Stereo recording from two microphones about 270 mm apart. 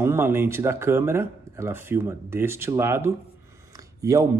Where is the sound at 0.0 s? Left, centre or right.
Centre.